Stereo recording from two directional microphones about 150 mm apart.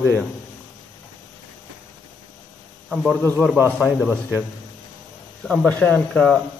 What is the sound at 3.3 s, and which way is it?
Speech, 10° left (ahead or behind).